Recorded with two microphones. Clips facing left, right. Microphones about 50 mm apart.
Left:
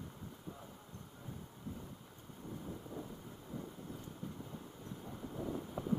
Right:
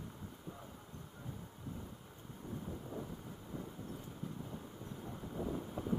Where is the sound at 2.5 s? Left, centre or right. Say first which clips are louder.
Right 1 dB; centre.